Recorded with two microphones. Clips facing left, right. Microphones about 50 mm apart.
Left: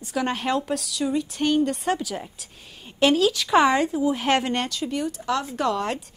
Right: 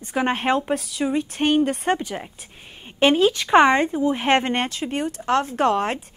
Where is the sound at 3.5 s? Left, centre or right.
Right.